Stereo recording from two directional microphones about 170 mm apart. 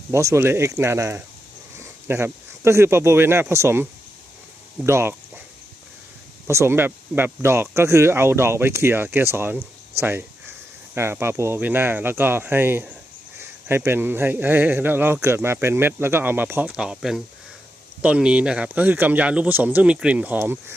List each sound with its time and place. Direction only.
0.1 s speech: 15° right (ahead or behind)
6.5 s speech: 15° right (ahead or behind)